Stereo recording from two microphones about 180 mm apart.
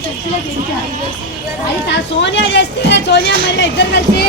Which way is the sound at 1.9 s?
80° left.